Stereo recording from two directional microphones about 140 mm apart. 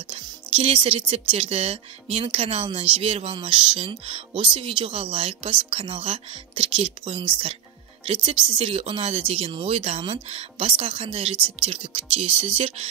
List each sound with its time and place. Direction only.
0.1 s a woman's voice: 40° right (ahead or behind)